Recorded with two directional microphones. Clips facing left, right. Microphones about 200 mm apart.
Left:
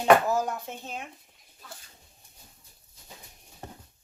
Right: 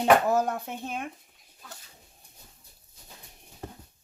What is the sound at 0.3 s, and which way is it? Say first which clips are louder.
Speech: right 3 dB; 60° right (ahead or behind).